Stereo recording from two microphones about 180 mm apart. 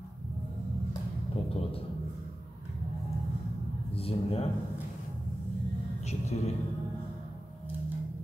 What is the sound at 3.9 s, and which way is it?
Speech, 35° left (ahead or behind).